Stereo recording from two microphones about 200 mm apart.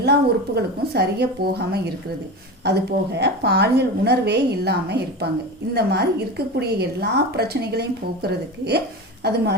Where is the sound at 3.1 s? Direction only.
55° right (ahead or behind).